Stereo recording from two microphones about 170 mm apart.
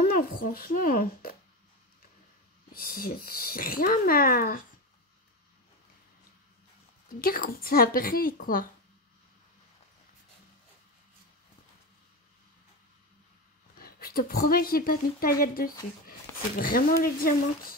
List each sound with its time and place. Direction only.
0.0 s a woman's voice: 60° left (ahead or behind)
2.7 s a woman's voice: 60° left (ahead or behind)
7.2 s a woman's voice: 55° left (ahead or behind)
13.7 s a woman's voice: 60° left (ahead or behind)